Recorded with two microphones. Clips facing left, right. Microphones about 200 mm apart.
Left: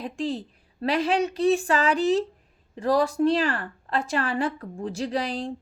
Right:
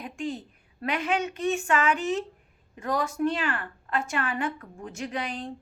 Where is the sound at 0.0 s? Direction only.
35° left (ahead or behind).